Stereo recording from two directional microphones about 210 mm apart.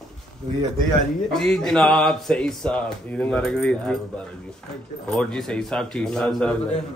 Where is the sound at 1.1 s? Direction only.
5° left (ahead or behind).